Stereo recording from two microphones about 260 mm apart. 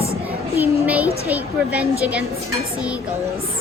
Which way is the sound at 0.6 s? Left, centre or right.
Centre.